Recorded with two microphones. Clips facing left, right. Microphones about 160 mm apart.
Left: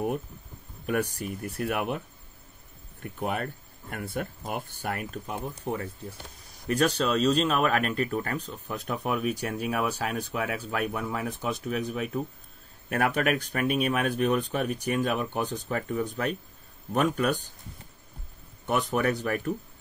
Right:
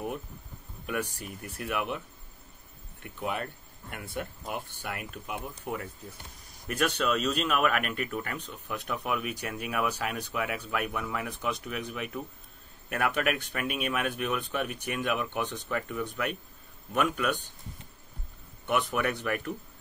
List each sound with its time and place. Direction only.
0.8 s speech: 45° left (ahead or behind)
18.7 s speech: 35° left (ahead or behind)